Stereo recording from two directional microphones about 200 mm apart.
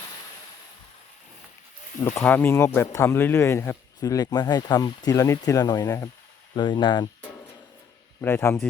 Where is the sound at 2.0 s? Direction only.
10° left (ahead or behind).